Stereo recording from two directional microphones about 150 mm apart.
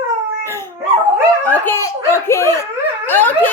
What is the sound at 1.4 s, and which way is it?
A child's voice, 10° left (ahead or behind).